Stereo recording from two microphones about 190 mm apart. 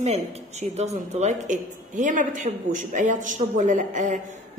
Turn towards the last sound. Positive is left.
turn(degrees=-40)  # may be behind; listen again after turning